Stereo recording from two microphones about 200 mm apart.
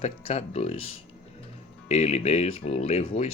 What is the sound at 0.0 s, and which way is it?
Speech, 30° left (ahead or behind).